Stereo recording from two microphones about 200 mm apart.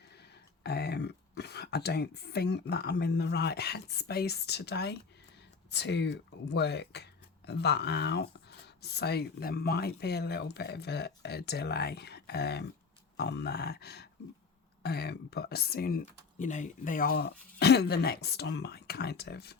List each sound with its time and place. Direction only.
0.1 s speech: 55° left (ahead or behind)